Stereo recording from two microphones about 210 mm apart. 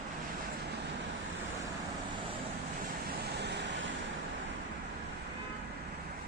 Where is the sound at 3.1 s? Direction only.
55° right (ahead or behind).